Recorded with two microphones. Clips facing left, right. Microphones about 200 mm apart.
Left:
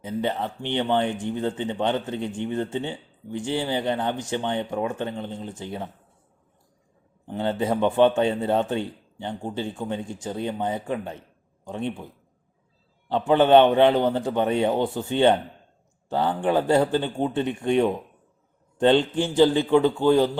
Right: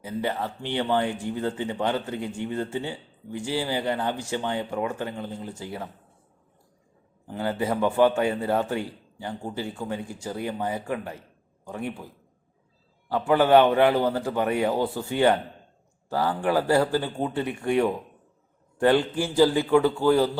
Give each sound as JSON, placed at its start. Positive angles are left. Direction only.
{"t": 0.0, "sound": "a man's voice", "side_deg": 20}
{"t": 7.3, "sound": "a man's voice", "side_deg": 25}